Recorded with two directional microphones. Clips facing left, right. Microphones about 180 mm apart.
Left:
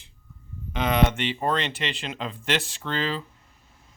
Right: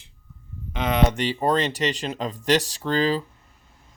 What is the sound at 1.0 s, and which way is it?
Speech, 40° right (ahead or behind).